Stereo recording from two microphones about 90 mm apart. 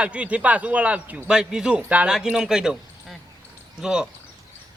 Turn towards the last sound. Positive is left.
turn(degrees=-10)  # may be behind; listen again after turning